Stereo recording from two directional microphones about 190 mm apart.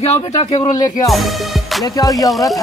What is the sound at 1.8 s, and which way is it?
Music, 20° left (ahead or behind).